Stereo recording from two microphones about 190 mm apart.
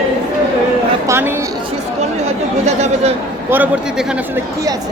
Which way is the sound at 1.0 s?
10° right (ahead or behind).